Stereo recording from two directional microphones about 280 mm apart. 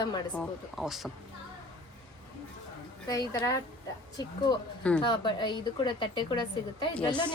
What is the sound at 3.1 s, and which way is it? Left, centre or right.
Speech, centre.